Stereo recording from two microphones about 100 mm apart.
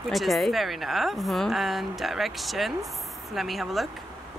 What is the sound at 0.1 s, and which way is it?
A woman's voice, centre (ahead or behind).